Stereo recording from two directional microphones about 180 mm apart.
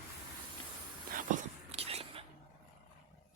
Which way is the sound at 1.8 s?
30° right (ahead or behind).